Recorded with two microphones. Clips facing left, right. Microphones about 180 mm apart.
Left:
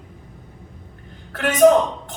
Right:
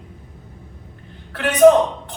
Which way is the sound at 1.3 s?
45° left (ahead or behind).